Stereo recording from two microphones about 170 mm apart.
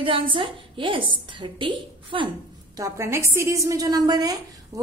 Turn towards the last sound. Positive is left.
turn(degrees=-20)  # may be behind; listen again after turning